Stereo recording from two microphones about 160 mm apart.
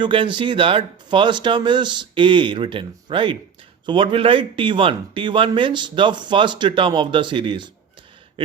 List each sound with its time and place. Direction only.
0.0 s speech: 30° right (ahead or behind)